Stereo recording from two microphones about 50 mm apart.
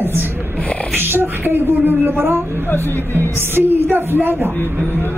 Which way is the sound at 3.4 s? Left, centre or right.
Right.